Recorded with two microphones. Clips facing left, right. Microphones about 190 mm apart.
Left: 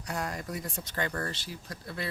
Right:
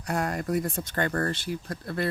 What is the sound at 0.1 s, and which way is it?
Speech, 55° right (ahead or behind).